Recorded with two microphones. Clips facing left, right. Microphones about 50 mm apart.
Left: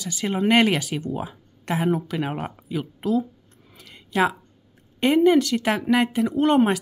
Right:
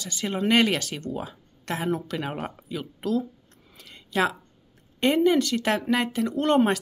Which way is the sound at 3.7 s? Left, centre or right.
Centre.